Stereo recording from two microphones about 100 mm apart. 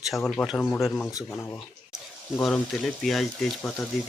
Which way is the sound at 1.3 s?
25° left (ahead or behind).